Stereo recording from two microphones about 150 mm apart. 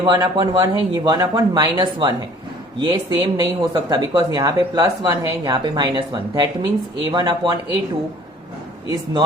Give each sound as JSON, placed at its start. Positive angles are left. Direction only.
{"t": 0.0, "sound": "speech", "side_deg": -25}